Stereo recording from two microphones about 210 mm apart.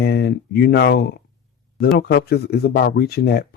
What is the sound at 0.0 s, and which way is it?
Speech, 50° left (ahead or behind).